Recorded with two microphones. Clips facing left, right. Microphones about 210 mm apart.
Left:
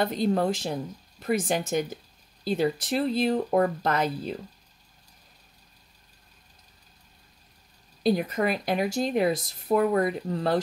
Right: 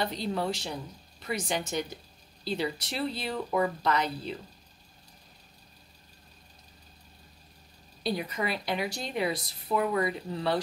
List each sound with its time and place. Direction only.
0.0 s speech: 50° left (ahead or behind)
8.0 s speech: 50° left (ahead or behind)